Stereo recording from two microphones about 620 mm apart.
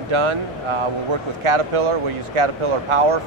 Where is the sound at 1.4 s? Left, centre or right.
Right.